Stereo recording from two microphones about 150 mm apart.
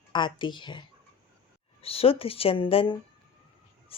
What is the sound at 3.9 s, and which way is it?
Music, 40° left (ahead or behind).